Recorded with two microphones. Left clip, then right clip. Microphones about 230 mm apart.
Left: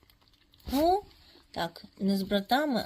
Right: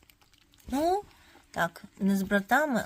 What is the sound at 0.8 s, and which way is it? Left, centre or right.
Speech, right.